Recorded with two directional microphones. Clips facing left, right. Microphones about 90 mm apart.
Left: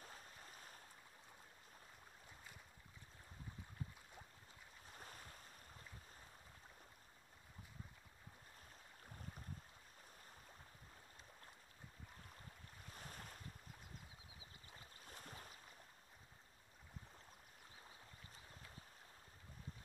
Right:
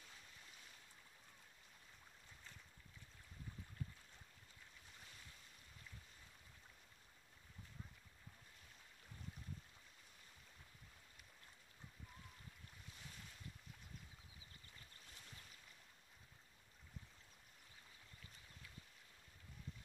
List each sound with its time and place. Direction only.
0.0 s a sound: 40° left (ahead or behind)
4.9 s boat: 45° left (ahead or behind)
12.8 s waves: 45° left (ahead or behind)
15.0 s boat: 45° left (ahead or behind)